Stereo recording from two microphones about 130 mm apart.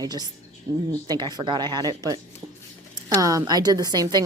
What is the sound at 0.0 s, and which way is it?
A woman's voice, 30° right (ahead or behind).